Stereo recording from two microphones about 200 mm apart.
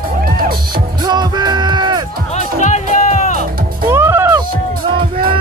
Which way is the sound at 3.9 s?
10° right (ahead or behind).